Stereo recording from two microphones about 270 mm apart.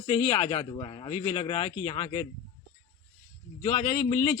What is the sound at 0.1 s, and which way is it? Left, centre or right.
A man's voice, centre.